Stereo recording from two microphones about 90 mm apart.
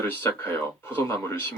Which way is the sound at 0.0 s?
25° left (ahead or behind).